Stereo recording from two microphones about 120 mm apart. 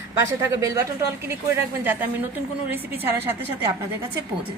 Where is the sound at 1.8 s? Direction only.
15° right (ahead or behind).